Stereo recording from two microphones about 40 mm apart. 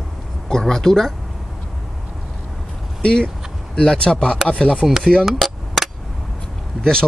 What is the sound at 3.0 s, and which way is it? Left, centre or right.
Speech, left.